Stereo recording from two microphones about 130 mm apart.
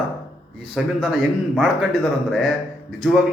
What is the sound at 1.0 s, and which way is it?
A man's voice, 10° right (ahead or behind).